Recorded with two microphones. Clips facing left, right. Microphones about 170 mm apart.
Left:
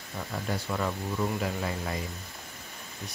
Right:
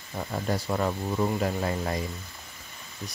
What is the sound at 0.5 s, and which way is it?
Speech, 40° right (ahead or behind).